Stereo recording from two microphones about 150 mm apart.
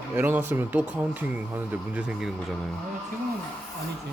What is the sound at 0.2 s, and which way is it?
Speech, 15° right (ahead or behind).